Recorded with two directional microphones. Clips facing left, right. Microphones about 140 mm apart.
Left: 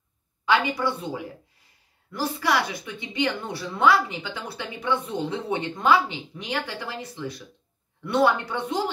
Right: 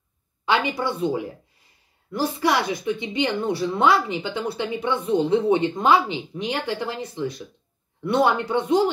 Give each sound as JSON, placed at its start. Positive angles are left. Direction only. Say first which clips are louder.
{"t": 0.5, "sound": "speech", "louder": "even", "side_deg": -25}
{"t": 8.0, "sound": "speech", "louder": "right 1 dB", "side_deg": -20}